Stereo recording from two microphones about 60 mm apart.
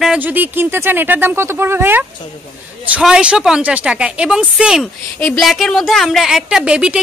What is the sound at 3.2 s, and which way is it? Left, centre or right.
Speech, centre.